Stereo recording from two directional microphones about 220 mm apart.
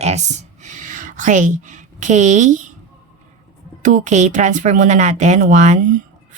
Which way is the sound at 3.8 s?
35° right (ahead or behind).